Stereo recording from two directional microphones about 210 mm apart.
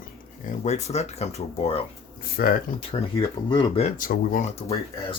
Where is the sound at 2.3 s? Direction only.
45° left (ahead or behind).